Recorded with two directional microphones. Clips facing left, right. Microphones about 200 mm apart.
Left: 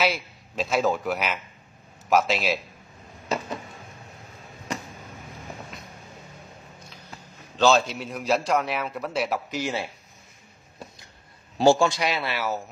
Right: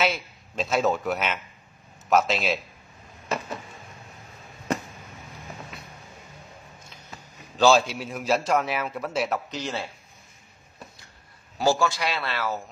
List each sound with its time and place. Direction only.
0.0 s a man's voice: centre (ahead or behind)
7.5 s a man's voice: 10° right (ahead or behind)
9.6 s a man's voice: 15° left (ahead or behind)
11.5 s a man's voice: 25° left (ahead or behind)